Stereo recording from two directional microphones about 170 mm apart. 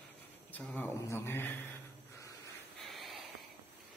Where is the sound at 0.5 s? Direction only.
10° left (ahead or behind).